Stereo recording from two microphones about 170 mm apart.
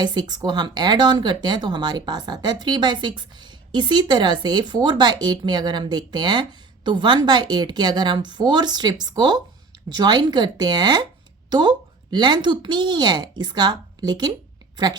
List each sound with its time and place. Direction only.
0.0 s speech: 25° right (ahead or behind)